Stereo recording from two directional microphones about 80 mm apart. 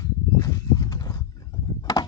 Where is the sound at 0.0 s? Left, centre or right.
Left.